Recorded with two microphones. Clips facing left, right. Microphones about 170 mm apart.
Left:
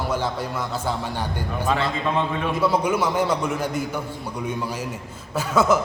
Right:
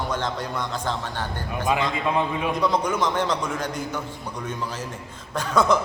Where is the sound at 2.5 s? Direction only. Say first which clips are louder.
Left 4 dB; 5° left (ahead or behind).